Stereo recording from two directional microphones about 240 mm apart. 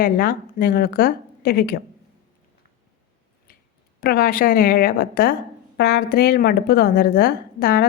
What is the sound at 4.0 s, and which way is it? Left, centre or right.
A woman's voice, left.